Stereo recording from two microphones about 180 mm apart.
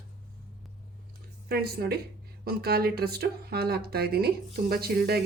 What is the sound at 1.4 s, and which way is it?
Speech, 60° right (ahead or behind).